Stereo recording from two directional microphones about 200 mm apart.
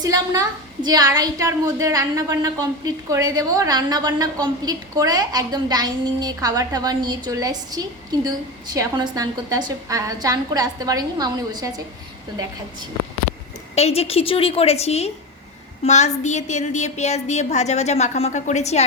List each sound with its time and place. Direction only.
0.0 s a woman's voice: 20° right (ahead or behind)
13.7 s a woman's voice: 30° left (ahead or behind)